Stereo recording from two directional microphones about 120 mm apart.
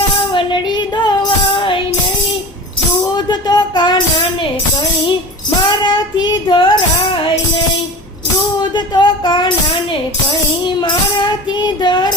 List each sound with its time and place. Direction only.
0.3 s music: 40° left (ahead or behind)
3.2 s music: 35° left (ahead or behind)
5.8 s music: 35° left (ahead or behind)
8.7 s a sound: 40° left (ahead or behind)
10.7 s music: 40° left (ahead or behind)
11.6 s a sound: 40° left (ahead or behind)